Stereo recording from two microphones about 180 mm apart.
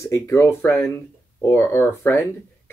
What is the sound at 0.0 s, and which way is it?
Speech, 15° left (ahead or behind).